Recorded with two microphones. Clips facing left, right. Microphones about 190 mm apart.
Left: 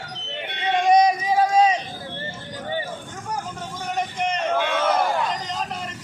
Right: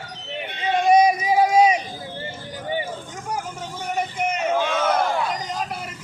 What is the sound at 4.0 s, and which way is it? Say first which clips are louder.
Crowd: even; 5° right (ahead or behind).